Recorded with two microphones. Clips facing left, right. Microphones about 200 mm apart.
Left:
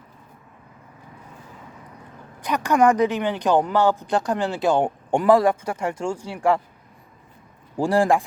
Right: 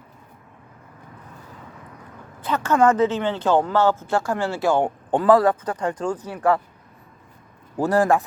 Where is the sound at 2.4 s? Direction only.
15° left (ahead or behind).